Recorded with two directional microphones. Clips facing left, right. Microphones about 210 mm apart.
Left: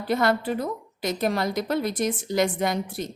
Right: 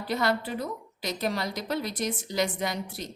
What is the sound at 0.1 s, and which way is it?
A woman's voice, 50° left (ahead or behind).